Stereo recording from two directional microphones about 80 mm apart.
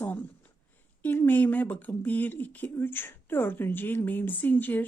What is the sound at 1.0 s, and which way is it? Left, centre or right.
A woman's voice, left.